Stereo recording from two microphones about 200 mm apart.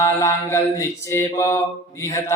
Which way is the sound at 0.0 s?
15° left (ahead or behind).